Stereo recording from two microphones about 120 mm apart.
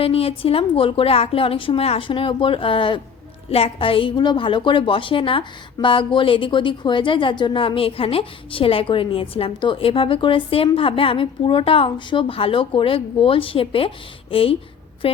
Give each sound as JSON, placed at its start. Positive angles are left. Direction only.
{"t": 0.0, "sound": "a woman's voice", "side_deg": 50}